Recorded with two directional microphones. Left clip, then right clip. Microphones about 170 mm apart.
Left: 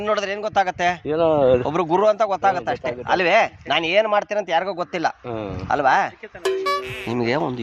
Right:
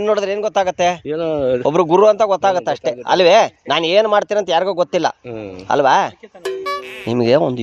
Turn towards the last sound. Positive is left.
turn(degrees=-75)  # may be behind; listen again after turning